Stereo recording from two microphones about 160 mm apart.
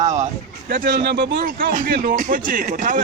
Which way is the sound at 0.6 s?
65° right (ahead or behind).